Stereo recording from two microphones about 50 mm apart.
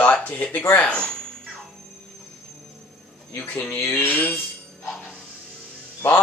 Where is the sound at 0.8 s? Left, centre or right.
Centre.